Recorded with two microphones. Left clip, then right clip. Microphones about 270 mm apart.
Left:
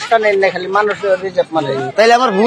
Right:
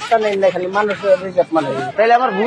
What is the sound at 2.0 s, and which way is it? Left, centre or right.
Speech, left.